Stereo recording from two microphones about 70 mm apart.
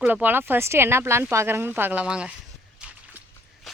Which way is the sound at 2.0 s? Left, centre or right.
Centre.